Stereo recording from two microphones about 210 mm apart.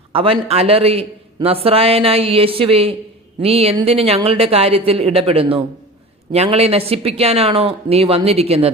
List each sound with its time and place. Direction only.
0.1 s a man's voice: 25° right (ahead or behind)